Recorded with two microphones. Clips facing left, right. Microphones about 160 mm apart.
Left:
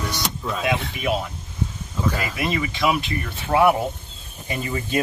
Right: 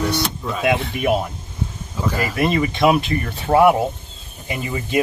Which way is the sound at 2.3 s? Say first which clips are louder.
Right 6 dB; 50° right (ahead or behind).